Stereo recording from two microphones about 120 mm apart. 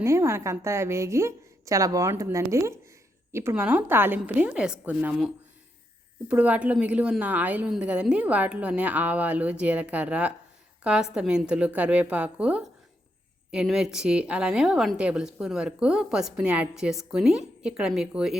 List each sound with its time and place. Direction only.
0.0 s a woman's voice: 25° right (ahead or behind)
6.2 s a woman's voice: 15° right (ahead or behind)